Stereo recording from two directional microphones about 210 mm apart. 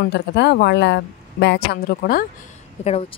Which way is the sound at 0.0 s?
55° left (ahead or behind).